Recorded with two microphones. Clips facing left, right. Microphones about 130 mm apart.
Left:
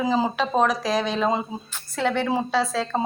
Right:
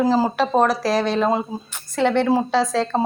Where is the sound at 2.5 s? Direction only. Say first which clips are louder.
Right 4 dB; 10° left (ahead or behind).